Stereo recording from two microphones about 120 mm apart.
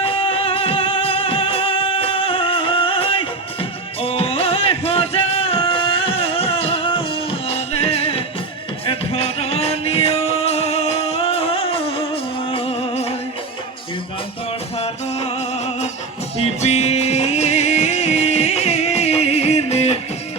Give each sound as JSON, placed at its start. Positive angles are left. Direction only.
{"t": 0.0, "sound": "music", "side_deg": 50}
{"t": 14.8, "sound": "music", "side_deg": 60}